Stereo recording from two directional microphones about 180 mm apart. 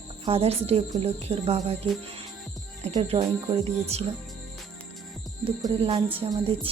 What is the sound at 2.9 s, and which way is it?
Speech, 30° right (ahead or behind).